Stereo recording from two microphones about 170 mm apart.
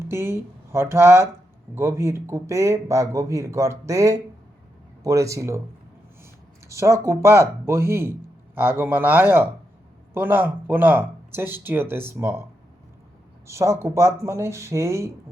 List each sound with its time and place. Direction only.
0.1 s speech: 15° right (ahead or behind)
6.7 s speech: 15° right (ahead or behind)
13.5 s speech: 15° right (ahead or behind)